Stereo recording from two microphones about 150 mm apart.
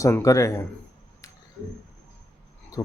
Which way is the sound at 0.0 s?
20° left (ahead or behind).